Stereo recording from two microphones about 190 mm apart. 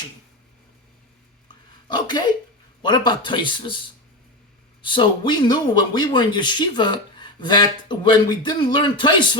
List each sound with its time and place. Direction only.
1.9 s speech: 25° left (ahead or behind)
4.8 s speech: 25° left (ahead or behind)